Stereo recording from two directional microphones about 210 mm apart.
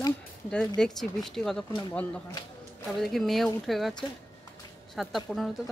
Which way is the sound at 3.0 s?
Centre (ahead or behind).